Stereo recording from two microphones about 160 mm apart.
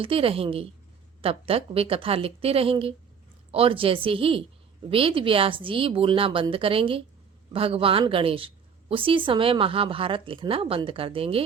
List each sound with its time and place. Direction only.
0.0 s a woman's voice: 35° right (ahead or behind)